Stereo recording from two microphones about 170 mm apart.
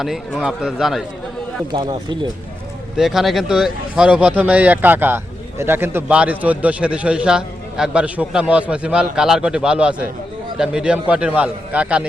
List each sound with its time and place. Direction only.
0.0 s a man's voice: centre (ahead or behind)
1.7 s speech: 25° right (ahead or behind)
3.0 s speech: centre (ahead or behind)